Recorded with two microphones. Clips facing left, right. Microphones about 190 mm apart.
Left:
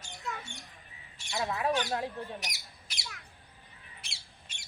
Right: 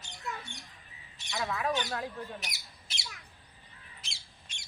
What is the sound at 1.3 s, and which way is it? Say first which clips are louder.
A child's voice: left 2 dB; 35° left (ahead or behind).